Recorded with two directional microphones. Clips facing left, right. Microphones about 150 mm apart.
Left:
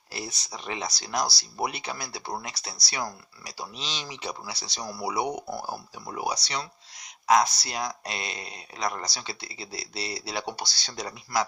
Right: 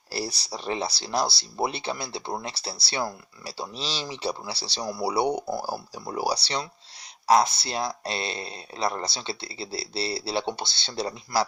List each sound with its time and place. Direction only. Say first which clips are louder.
0.1 s speech: right 5 dB; 35° right (ahead or behind)